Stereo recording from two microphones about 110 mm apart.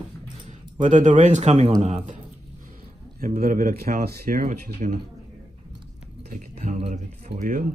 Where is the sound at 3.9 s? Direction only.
90° right.